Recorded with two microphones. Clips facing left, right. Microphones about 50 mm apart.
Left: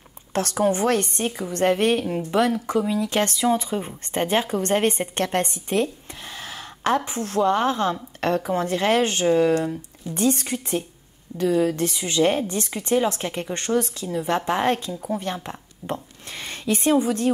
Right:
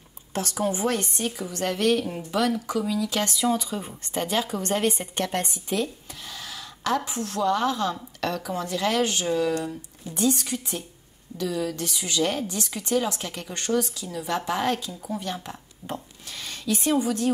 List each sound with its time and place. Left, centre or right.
0.3 s speech: left
1.5 s a woman's voice: left
6.4 s a sound: left
7.1 s a woman's voice: left